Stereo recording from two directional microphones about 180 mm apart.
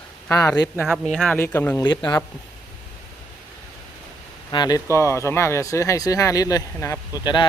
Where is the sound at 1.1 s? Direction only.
Centre (ahead or behind).